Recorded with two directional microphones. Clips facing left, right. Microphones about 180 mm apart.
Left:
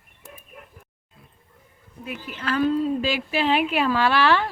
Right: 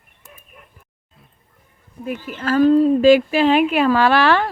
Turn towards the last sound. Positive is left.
turn(degrees=-50)  # may be behind; listen again after turning